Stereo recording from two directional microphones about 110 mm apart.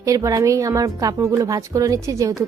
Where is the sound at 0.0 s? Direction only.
30° right (ahead or behind).